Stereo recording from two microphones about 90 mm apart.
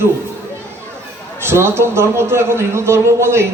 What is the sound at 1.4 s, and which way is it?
A man's voice, 25° right (ahead or behind).